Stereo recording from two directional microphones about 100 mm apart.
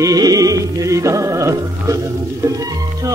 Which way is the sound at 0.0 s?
35° right (ahead or behind).